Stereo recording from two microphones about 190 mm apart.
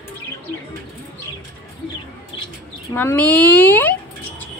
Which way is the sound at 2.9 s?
10° left (ahead or behind).